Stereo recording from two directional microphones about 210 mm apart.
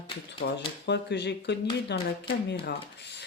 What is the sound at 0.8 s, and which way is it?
Speech, 55° left (ahead or behind).